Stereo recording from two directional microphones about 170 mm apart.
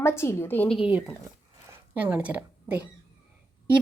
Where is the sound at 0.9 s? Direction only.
5° right (ahead or behind).